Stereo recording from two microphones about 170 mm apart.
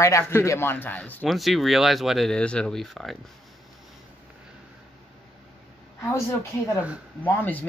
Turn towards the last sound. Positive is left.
turn(degrees=10)  # may be behind; listen again after turning